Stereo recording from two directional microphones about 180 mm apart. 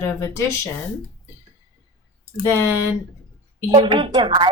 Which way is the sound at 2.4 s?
15° left (ahead or behind).